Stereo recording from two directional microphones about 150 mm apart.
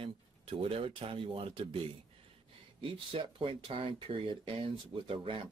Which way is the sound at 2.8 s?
35° right (ahead or behind).